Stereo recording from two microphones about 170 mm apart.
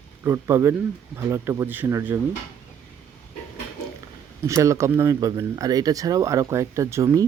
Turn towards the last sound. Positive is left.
turn(degrees=-15)  # may be behind; listen again after turning